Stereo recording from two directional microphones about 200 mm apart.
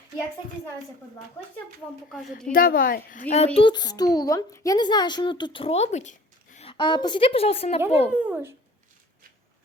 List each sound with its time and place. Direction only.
2.5 s a child's voice: 45° left (ahead or behind); by 8.1 s 30° left (ahead or behind)
8.1 s speech: 10° right (ahead or behind)